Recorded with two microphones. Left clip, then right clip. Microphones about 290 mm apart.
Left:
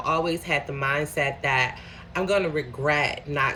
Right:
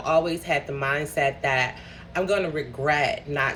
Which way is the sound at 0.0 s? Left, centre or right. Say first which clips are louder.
Right 2 dB; centre.